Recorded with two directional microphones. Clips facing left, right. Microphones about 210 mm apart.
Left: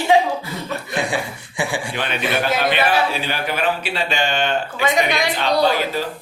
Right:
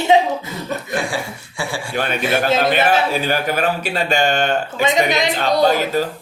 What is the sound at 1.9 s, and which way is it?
Speech, 45° right (ahead or behind).